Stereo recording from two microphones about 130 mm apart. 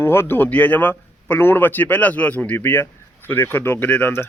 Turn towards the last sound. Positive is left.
turn(degrees=15)  # may be behind; listen again after turning